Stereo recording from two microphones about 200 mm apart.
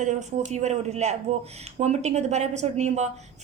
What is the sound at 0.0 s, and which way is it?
A woman's voice, 35° right (ahead or behind).